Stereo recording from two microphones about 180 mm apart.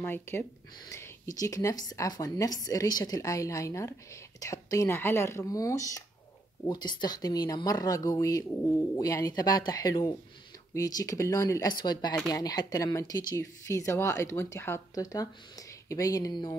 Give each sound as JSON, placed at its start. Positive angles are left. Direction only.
{"t": 0.0, "sound": "speech", "side_deg": 10}